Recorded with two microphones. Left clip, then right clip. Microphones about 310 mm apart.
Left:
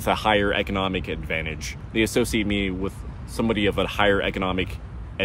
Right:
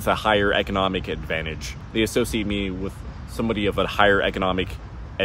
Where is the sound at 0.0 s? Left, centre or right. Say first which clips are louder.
Right 1 dB; centre.